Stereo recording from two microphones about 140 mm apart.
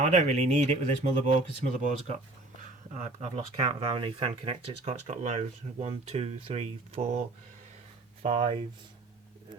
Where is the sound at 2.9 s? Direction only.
55° right (ahead or behind).